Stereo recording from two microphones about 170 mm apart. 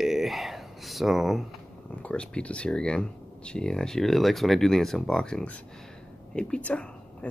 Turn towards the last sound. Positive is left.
turn(degrees=5)  # may be behind; listen again after turning